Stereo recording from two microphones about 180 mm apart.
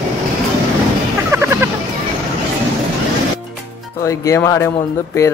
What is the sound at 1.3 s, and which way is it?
Music, 15° right (ahead or behind).